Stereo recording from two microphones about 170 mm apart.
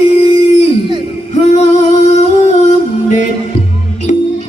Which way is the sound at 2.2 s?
40° left (ahead or behind).